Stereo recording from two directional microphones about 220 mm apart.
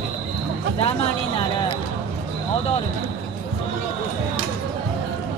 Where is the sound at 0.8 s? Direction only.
25° left (ahead or behind).